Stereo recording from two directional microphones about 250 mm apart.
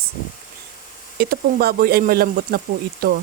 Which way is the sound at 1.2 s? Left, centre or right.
Right.